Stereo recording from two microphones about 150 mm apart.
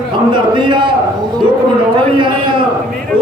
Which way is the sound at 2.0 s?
35° right (ahead or behind).